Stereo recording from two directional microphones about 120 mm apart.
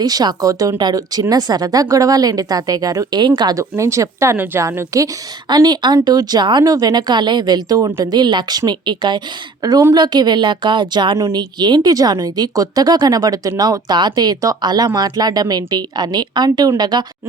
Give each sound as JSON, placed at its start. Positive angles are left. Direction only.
{"t": 0.0, "sound": "speech", "side_deg": -35}
{"t": 5.5, "sound": "speech", "side_deg": -35}
{"t": 8.1, "sound": "speech", "side_deg": -40}